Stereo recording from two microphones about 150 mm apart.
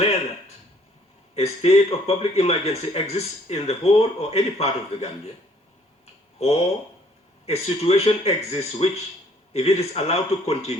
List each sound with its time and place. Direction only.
1.4 s speech: 40° left (ahead or behind)
6.4 s speech: 45° left (ahead or behind)